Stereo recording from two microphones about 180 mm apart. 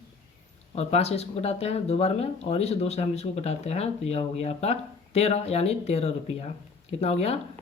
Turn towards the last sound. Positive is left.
turn(degrees=35)  # may be behind; listen again after turning